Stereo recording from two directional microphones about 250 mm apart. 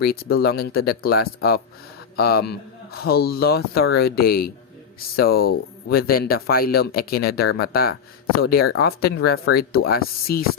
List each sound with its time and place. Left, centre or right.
0.0 s speech: left